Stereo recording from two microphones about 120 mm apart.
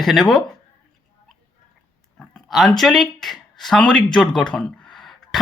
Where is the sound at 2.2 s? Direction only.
5° left (ahead or behind).